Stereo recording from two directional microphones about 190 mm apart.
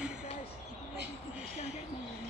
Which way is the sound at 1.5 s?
35° left (ahead or behind).